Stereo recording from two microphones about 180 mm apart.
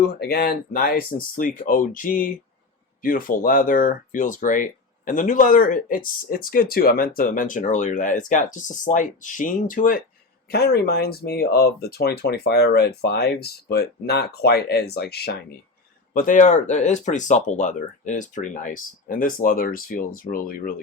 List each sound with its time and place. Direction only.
0.1 s speech: 60° left (ahead or behind)
10.5 s speech: 60° left (ahead or behind)
16.1 s speech: 45° left (ahead or behind)